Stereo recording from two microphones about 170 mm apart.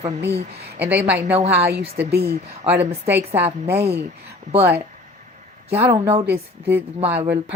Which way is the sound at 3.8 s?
70° right (ahead or behind).